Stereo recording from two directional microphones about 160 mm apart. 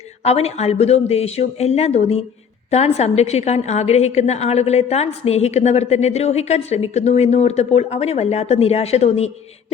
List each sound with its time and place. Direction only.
0.3 s a woman's voice: 40° left (ahead or behind)